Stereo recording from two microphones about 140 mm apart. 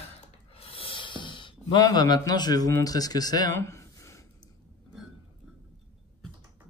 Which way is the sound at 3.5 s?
20° left (ahead or behind).